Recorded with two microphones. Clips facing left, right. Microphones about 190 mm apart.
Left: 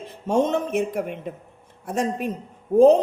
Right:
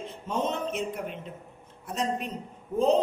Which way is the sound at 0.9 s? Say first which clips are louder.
Left 8 dB; 60° left (ahead or behind).